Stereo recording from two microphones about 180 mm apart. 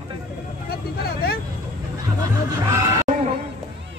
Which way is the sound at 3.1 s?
50° right (ahead or behind).